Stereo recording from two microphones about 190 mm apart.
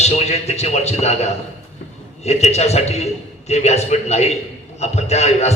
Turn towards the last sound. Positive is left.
turn(degrees=35)  # may be behind; listen again after turning